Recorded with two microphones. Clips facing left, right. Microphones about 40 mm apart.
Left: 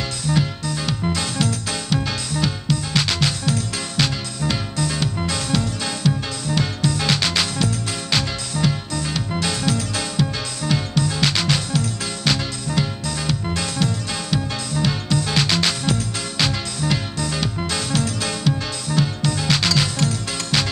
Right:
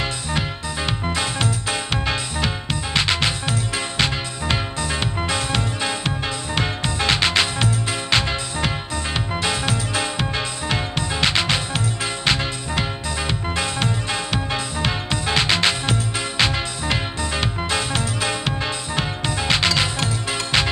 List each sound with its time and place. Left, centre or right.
0.3 s music: right